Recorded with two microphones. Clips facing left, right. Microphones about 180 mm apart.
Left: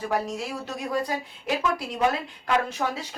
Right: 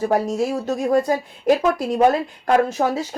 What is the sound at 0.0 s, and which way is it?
Speech, 45° right (ahead or behind).